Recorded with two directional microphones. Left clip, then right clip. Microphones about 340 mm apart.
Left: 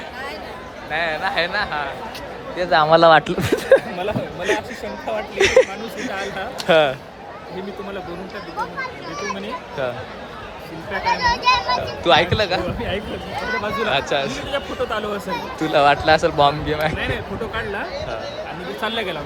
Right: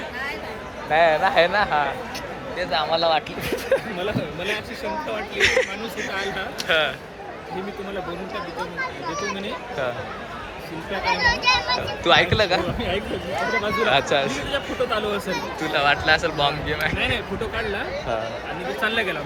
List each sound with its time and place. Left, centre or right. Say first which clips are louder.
0.9 s a man's voice: right 4 dB; centre
2.6 s speech: left 8 dB; left
5.1 s speech: left 5 dB; centre
11.0 s speech: left 2 dB; left
12.0 s speech: left 1 dB; centre
13.8 s speech: right 1 dB; centre
15.3 s speech: left 3 dB; left
18.9 s speech: right 1 dB; left